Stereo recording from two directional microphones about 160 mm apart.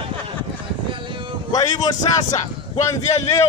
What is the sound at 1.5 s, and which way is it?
Speech, 25° left (ahead or behind).